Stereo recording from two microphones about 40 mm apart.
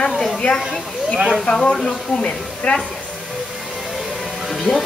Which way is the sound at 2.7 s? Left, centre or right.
Left.